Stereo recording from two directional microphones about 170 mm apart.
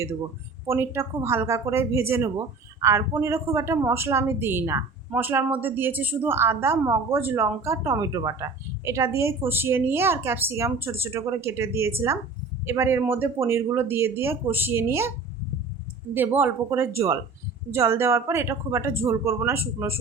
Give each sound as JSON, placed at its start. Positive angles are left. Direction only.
{"t": 0.7, "sound": "a woman's voice", "side_deg": -15}
{"t": 16.1, "sound": "a woman's voice", "side_deg": -10}